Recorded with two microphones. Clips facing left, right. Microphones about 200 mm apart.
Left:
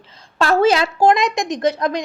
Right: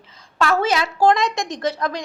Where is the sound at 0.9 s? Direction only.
15° left (ahead or behind).